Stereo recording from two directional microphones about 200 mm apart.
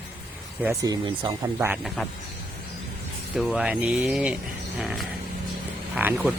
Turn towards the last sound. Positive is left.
turn(degrees=-10)  # may be behind; listen again after turning